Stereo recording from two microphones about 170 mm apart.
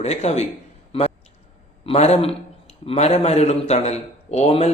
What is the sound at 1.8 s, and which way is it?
Speech, 40° left (ahead or behind).